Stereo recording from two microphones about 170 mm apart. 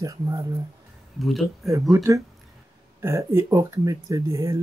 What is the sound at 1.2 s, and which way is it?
Speech, centre (ahead or behind).